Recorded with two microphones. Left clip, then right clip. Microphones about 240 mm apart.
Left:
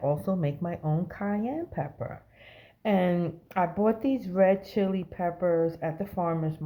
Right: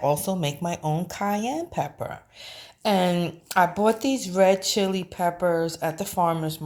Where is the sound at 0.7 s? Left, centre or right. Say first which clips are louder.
Right 5 dB; right.